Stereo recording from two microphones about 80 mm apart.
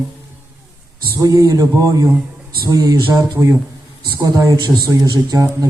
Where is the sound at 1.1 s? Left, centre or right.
Right.